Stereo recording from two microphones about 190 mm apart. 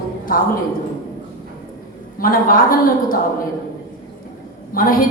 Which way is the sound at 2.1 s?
50° left (ahead or behind).